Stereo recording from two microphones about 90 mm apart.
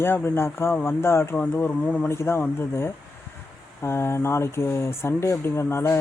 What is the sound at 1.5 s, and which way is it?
Speech, 15° left (ahead or behind).